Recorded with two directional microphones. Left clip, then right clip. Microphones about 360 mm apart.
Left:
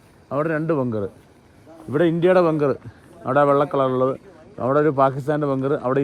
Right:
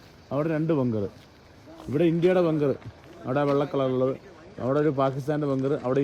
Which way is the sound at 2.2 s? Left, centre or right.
Left.